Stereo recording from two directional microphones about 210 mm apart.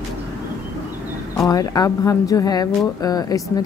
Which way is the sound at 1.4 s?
15° left (ahead or behind).